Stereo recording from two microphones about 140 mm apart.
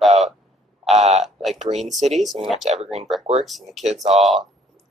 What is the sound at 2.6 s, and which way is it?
Speech, 50° right (ahead or behind).